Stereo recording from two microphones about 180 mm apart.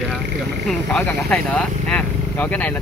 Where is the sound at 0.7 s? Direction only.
5° left (ahead or behind).